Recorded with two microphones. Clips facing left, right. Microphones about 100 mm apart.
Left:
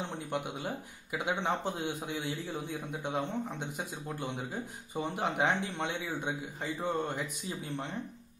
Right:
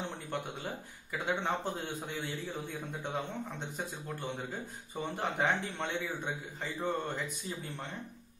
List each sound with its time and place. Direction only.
0.3 s speech: 15° left (ahead or behind)